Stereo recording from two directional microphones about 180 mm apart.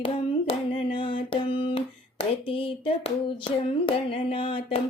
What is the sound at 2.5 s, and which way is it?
Hands, 30° left (ahead or behind).